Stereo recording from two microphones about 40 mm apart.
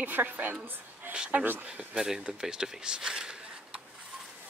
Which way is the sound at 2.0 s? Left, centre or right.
Centre.